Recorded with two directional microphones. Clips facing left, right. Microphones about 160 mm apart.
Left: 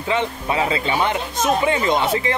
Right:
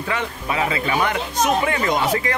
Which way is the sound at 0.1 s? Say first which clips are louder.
Left 4 dB; 25° left (ahead or behind).